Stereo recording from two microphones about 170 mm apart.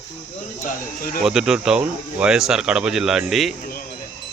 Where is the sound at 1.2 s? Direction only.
5° right (ahead or behind).